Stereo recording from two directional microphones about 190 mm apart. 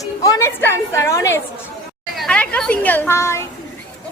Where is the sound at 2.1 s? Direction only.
5° left (ahead or behind).